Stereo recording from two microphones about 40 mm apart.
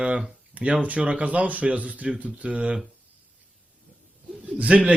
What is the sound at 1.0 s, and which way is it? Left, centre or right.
Speech, right.